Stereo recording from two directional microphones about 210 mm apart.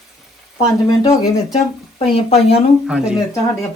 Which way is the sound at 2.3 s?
30° left (ahead or behind).